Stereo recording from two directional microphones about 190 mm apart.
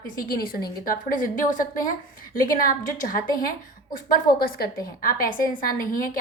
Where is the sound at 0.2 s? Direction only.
50° left (ahead or behind).